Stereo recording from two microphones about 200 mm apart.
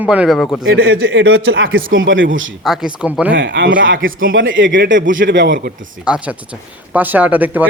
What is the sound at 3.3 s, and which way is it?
A man's voice, 65° right (ahead or behind).